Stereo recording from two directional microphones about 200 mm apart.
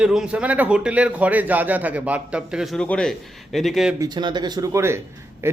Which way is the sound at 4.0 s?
20° right (ahead or behind).